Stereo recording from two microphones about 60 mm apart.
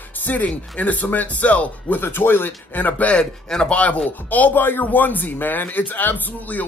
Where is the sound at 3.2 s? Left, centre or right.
Centre.